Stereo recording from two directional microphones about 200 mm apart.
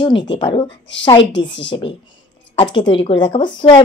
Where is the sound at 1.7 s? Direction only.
20° left (ahead or behind).